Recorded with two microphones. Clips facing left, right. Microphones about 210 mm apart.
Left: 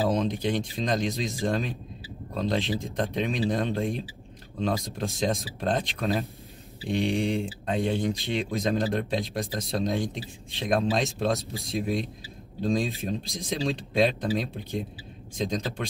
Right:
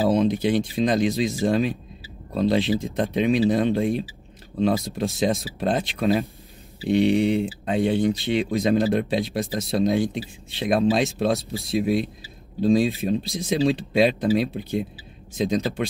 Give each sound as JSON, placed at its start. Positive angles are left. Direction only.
{"t": 0.4, "sound": "speech", "side_deg": -5}